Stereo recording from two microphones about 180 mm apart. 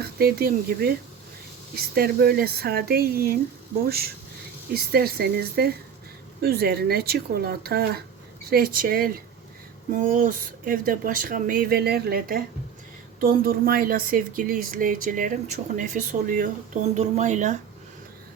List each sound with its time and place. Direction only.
0.0 s speech: 60° right (ahead or behind); by 17.6 s 40° right (ahead or behind)